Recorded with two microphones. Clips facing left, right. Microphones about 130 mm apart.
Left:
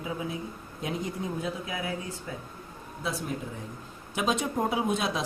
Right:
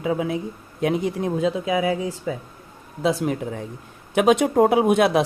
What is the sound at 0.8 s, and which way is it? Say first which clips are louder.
Speech: right 11 dB; 75° right (ahead or behind).